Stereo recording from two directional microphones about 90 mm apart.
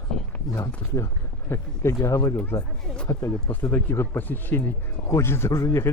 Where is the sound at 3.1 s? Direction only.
35° left (ahead or behind).